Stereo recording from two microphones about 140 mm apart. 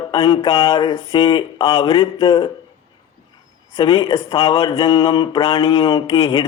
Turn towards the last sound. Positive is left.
turn(degrees=40)  # may be behind; listen again after turning